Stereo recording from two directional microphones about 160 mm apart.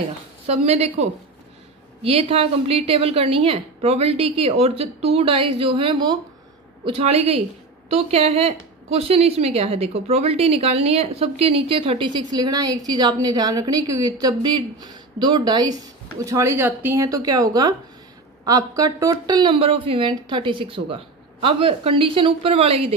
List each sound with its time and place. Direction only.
0.5 s a woman's voice: 40° right (ahead or behind)
2.0 s a woman's voice: 40° right (ahead or behind)